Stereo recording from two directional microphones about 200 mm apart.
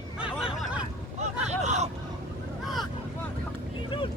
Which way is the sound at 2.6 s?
Centre (ahead or behind).